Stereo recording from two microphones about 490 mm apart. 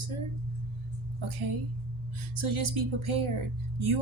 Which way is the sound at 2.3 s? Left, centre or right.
Right.